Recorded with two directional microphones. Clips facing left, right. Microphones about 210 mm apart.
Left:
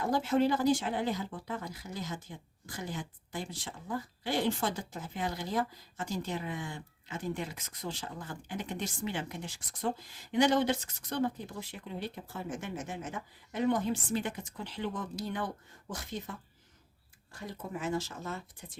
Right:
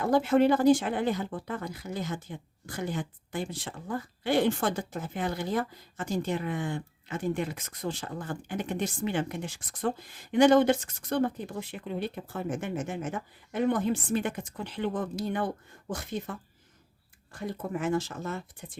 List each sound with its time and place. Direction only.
0.1 s speech: 55° right (ahead or behind)
17.3 s speech: 55° right (ahead or behind)